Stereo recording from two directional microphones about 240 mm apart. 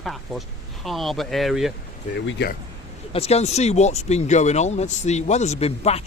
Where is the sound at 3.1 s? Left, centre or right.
Left.